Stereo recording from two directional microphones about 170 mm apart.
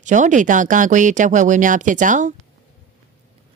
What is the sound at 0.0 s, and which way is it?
Speech, 45° right (ahead or behind).